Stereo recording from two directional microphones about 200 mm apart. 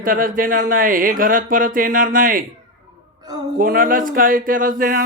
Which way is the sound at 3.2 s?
20° right (ahead or behind).